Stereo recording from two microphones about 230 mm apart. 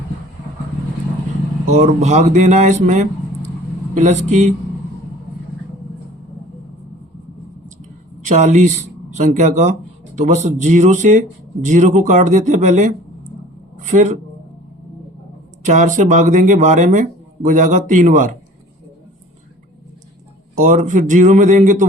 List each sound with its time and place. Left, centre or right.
1.7 s speech: right
8.3 s speech: right
15.6 s speech: right
20.6 s speech: right